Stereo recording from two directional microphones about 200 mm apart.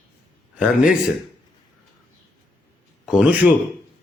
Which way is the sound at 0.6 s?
5° right (ahead or behind).